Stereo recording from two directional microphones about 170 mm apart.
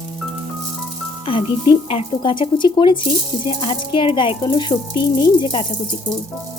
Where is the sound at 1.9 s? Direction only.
30° left (ahead or behind).